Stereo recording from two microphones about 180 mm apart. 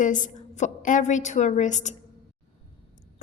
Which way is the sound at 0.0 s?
45° left (ahead or behind).